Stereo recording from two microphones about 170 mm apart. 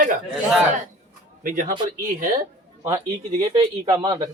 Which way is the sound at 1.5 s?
50° right (ahead or behind).